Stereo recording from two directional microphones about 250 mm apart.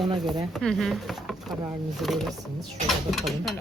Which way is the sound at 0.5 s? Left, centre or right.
Centre.